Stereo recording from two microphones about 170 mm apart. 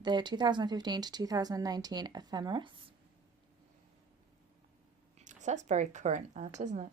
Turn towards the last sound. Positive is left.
turn(degrees=-45)  # may be behind; listen again after turning